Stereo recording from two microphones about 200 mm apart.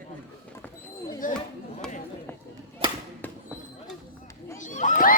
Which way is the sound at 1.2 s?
40° left (ahead or behind).